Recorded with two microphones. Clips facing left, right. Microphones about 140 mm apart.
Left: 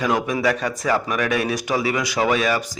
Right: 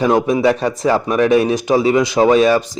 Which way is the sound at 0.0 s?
30° right (ahead or behind).